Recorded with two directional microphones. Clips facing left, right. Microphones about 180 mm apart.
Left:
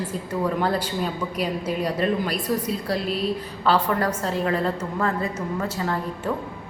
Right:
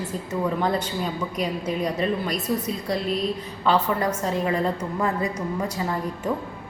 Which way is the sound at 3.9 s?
10° right (ahead or behind).